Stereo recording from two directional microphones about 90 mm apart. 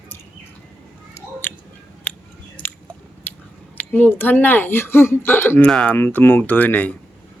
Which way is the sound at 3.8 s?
20° left (ahead or behind).